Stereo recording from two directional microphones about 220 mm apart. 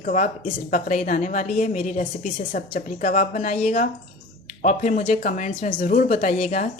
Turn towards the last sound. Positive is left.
turn(degrees=35)  # may be behind; listen again after turning